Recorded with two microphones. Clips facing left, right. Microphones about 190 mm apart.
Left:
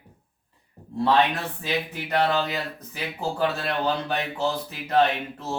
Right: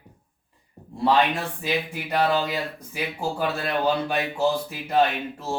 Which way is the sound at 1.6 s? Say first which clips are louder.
Even; 10° right (ahead or behind).